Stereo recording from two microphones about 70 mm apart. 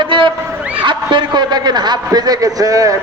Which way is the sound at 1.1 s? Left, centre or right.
Right.